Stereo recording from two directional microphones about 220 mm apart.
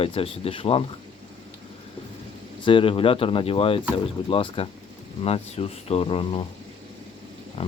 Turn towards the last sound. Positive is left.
turn(degrees=25)  # may be behind; listen again after turning